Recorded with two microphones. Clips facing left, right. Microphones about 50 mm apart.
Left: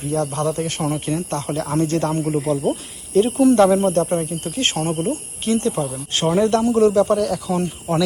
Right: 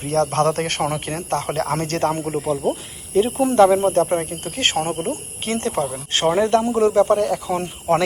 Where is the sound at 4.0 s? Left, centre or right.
Right.